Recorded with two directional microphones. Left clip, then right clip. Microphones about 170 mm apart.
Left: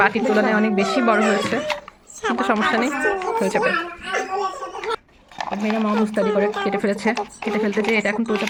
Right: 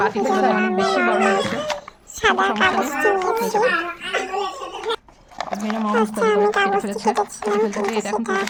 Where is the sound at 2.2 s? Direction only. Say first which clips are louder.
Right 3 dB; 30° right (ahead or behind).